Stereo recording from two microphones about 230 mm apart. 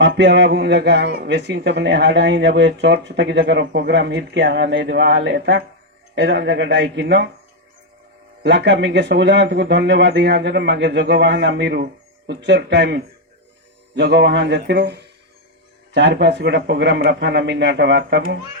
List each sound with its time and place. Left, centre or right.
0.0 s speech: right
8.4 s speech: right